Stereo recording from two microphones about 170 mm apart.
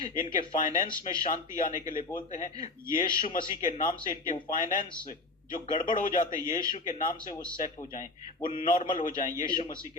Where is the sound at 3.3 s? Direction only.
55° left (ahead or behind).